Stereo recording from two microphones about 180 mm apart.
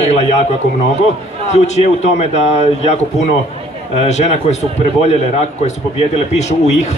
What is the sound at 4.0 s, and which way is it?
Speech, 40° left (ahead or behind).